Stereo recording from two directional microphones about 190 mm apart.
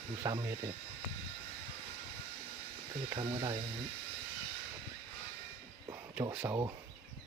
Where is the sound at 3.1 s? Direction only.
20° right (ahead or behind).